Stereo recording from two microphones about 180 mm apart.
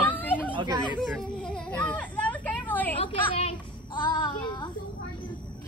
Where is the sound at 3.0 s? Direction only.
30° left (ahead or behind).